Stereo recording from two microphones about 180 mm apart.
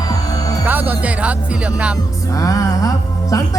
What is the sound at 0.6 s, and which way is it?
Music, 10° right (ahead or behind).